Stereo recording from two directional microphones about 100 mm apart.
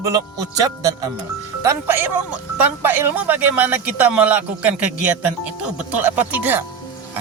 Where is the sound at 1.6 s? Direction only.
25° right (ahead or behind).